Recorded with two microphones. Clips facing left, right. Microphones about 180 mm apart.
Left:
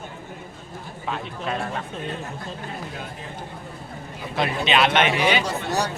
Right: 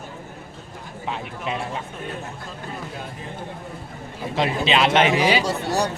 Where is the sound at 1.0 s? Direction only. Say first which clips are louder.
Even; 15° right (ahead or behind).